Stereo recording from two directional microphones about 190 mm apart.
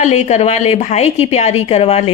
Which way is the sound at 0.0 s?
35° left (ahead or behind).